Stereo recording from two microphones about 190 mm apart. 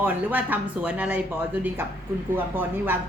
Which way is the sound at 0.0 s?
10° right (ahead or behind).